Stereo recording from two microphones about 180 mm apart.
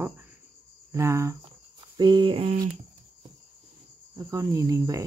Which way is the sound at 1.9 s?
25° right (ahead or behind).